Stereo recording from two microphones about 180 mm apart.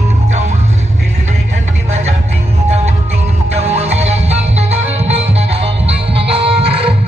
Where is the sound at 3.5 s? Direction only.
35° right (ahead or behind).